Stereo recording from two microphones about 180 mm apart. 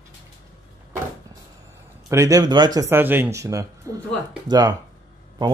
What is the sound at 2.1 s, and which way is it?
Speech, 15° right (ahead or behind).